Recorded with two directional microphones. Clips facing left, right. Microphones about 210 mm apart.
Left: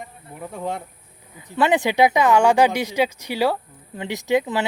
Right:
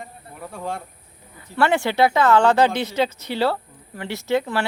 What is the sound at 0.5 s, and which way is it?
Speech, 20° left (ahead or behind).